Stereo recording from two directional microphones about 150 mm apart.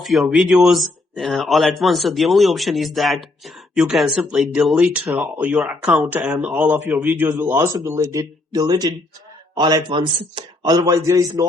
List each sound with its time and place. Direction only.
0.0 s speech: centre (ahead or behind); by 11.4 s 20° right (ahead or behind)